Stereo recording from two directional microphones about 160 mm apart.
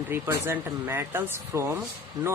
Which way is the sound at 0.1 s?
15° right (ahead or behind).